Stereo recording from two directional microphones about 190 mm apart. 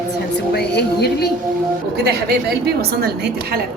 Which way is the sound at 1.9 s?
55° right (ahead or behind).